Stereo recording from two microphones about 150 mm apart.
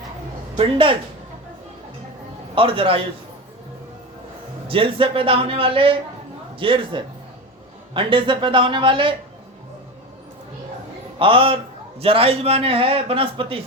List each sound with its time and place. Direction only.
0.5 s a man's voice: 35° right (ahead or behind)
2.6 s a man's voice: 35° right (ahead or behind)
4.7 s a man's voice: 35° right (ahead or behind)
11.2 s a man's voice: 35° right (ahead or behind)